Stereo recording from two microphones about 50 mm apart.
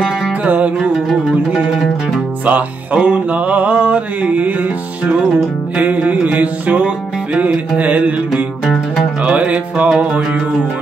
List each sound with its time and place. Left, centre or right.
2.4 s music: right
3.0 s mantra: right
5.8 s music: right
7.3 s mantra: right
9.2 s mantra: right